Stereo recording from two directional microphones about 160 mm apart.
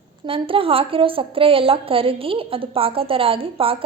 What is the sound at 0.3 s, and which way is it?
A woman's voice, 35° right (ahead or behind).